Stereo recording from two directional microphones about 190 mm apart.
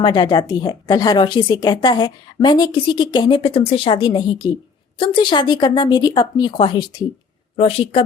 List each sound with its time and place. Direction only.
0.0 s a woman's voice: 20° left (ahead or behind)